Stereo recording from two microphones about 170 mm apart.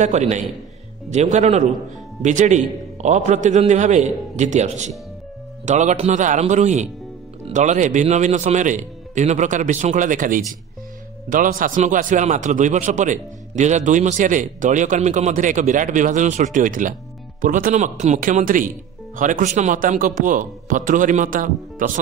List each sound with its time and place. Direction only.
0.0 s a man's voice: 40° right (ahead or behind)